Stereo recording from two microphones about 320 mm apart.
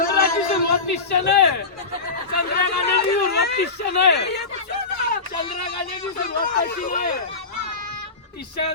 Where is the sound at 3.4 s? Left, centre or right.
Left.